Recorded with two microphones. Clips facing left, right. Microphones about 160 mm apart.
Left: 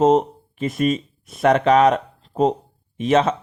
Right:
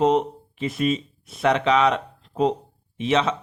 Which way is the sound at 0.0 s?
40° left (ahead or behind).